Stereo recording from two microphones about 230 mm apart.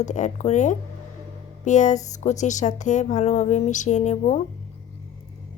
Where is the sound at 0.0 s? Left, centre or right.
Left.